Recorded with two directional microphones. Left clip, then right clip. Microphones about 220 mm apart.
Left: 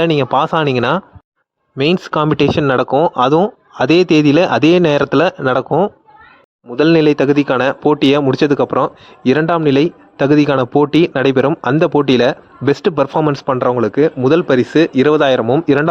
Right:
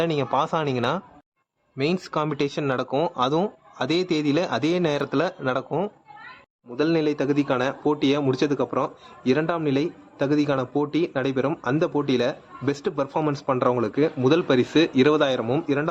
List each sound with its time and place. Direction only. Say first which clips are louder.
0.0 s a man's voice: left 10 dB; 40° left (ahead or behind)